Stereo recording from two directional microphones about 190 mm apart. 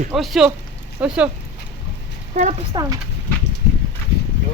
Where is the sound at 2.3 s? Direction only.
40° right (ahead or behind).